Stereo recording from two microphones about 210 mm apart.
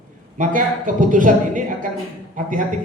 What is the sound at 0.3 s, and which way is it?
A woman's voice, 40° right (ahead or behind).